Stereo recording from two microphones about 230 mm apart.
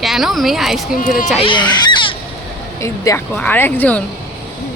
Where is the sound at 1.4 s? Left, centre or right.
Left.